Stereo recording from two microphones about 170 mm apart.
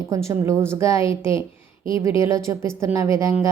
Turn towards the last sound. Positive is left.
turn(degrees=-15)  # may be behind; listen again after turning